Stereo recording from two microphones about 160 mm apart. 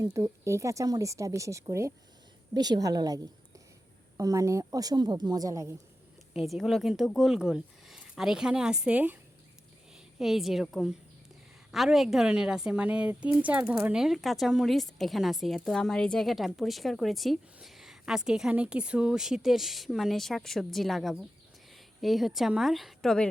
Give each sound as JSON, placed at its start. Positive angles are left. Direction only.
{"t": 0.0, "sound": "speech", "side_deg": -20}
{"t": 4.2, "sound": "speech", "side_deg": -20}
{"t": 6.5, "sound": "a woman's voice", "side_deg": 0}
{"t": 10.2, "sound": "a woman's voice", "side_deg": 0}